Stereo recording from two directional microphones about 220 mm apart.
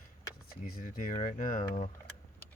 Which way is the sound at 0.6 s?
40° left (ahead or behind).